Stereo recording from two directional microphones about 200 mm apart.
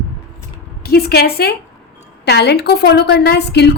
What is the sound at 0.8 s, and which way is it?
A woman's voice, 50° left (ahead or behind).